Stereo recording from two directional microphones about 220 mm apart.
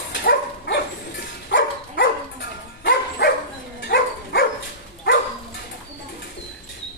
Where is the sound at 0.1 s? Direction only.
50° left (ahead or behind).